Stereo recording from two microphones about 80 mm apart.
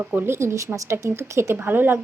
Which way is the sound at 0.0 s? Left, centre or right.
Right.